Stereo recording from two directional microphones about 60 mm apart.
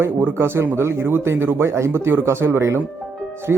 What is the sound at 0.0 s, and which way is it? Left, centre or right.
Speech, right.